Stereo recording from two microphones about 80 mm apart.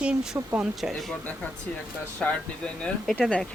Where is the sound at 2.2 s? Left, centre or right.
Centre.